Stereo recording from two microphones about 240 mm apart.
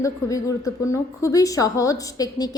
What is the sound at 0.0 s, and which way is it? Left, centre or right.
A woman's voice, centre.